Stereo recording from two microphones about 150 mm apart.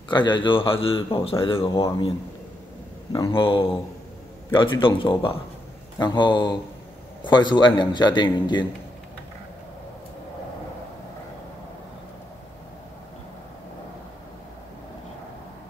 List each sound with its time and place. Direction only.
0.1 s a man's voice: 30° left (ahead or behind)
3.1 s a man's voice: 30° left (ahead or behind)